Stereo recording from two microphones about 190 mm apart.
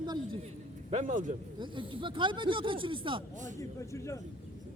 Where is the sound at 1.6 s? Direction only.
25° right (ahead or behind).